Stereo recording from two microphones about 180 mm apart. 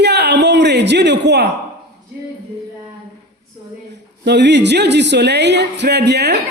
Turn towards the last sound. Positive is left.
turn(degrees=-70)  # may be behind; listen again after turning